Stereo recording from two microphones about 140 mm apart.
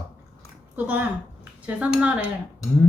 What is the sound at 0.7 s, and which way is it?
Speech, 10° right (ahead or behind).